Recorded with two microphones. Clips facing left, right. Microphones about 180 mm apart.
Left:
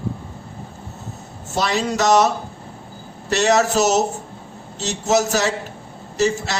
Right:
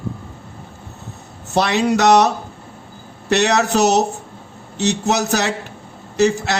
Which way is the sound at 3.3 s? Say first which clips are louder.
Right 1 dB; 65° right (ahead or behind).